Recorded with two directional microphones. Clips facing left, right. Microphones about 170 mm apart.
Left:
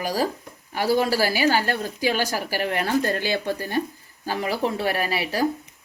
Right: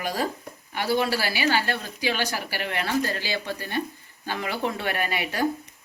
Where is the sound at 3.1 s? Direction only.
55° left (ahead or behind).